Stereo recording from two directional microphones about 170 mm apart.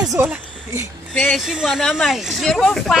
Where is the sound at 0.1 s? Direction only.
10° right (ahead or behind).